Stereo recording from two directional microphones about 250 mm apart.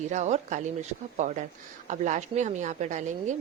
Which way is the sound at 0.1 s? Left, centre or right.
Right.